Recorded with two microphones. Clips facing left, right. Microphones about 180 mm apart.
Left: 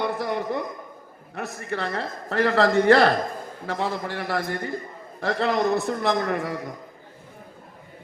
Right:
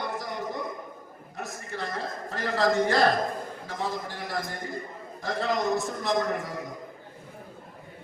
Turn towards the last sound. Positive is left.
turn(degrees=65)  # may be behind; listen again after turning